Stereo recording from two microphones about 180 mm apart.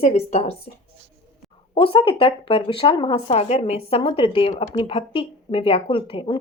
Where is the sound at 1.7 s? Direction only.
30° left (ahead or behind).